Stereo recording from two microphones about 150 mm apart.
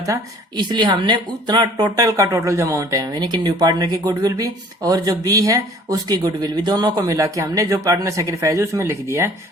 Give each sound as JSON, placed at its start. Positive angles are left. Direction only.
{"t": 0.0, "sound": "speech", "side_deg": -25}